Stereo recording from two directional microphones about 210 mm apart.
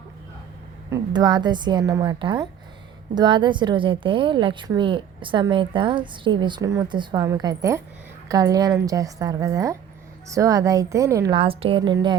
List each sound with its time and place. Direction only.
0.9 s a woman's voice: 20° right (ahead or behind)